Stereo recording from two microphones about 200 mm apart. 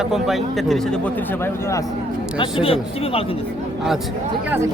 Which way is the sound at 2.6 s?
30° left (ahead or behind).